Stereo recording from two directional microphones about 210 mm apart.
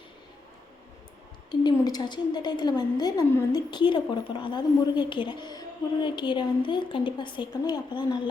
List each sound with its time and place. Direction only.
1.5 s a woman's voice: 20° left (ahead or behind)